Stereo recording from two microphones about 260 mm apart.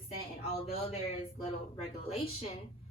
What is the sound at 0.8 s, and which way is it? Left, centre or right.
Speech, left.